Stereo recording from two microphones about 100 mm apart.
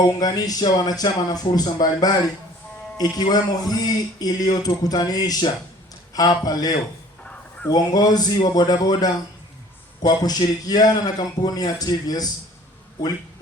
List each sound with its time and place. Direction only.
0.2 s a man's voice: 40° left (ahead or behind)
10.2 s a man's voice: 40° left (ahead or behind)